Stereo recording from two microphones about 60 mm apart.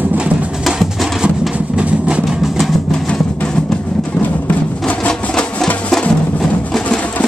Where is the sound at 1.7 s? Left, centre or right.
Centre.